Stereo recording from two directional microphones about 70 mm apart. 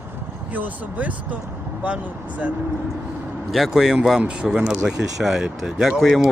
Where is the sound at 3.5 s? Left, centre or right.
Centre.